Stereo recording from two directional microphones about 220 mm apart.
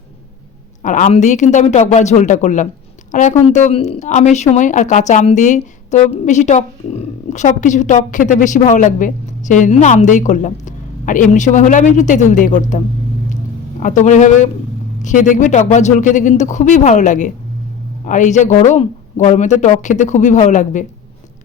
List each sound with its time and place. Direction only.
0.8 s a woman's voice: 35° left (ahead or behind)